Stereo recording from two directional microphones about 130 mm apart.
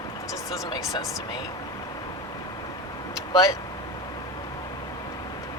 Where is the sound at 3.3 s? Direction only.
25° left (ahead or behind).